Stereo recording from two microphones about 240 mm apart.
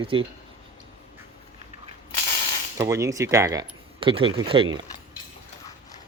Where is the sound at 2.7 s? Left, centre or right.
Centre.